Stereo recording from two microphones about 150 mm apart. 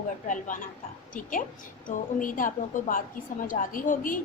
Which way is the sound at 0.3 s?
60° left (ahead or behind).